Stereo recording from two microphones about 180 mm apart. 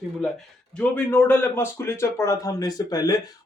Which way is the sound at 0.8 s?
10° left (ahead or behind).